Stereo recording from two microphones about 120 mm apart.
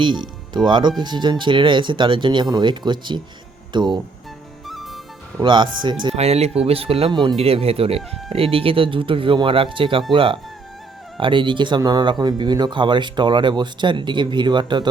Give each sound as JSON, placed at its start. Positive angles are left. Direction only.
{"t": 0.0, "sound": "speech", "side_deg": -40}
{"t": 4.6, "sound": "music", "side_deg": 0}
{"t": 5.4, "sound": "speech", "side_deg": -40}
{"t": 6.1, "sound": "speech", "side_deg": -60}
{"t": 7.1, "sound": "speech", "side_deg": -40}
{"t": 7.3, "sound": "speech", "side_deg": -55}